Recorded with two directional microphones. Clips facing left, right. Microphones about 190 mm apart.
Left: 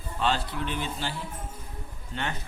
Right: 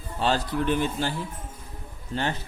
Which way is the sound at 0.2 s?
40° right (ahead or behind).